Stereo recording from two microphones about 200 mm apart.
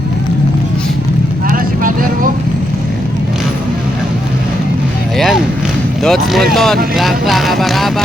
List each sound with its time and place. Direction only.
1.5 s vehicle: 45° right (ahead or behind)
5.1 s music: centre (ahead or behind)
6.0 s vehicle: centre (ahead or behind)